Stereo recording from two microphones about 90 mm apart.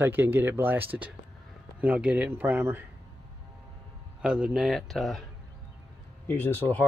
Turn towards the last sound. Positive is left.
turn(degrees=20)  # may be behind; listen again after turning